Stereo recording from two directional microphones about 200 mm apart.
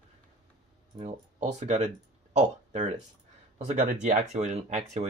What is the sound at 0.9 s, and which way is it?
Speech, 35° right (ahead or behind).